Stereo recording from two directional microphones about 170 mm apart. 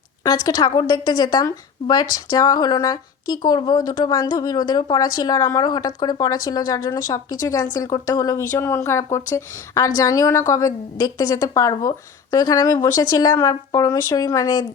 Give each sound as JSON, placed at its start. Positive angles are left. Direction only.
{"t": 0.3, "sound": "speech", "side_deg": 25}